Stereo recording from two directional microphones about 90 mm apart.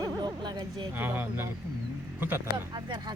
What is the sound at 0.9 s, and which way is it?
Speech, 20° right (ahead or behind).